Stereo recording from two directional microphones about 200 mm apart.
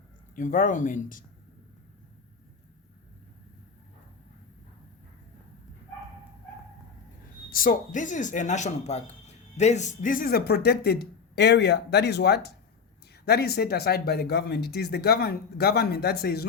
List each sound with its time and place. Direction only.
0.3 s speech: 40° left (ahead or behind)
7.5 s speech: 45° left (ahead or behind)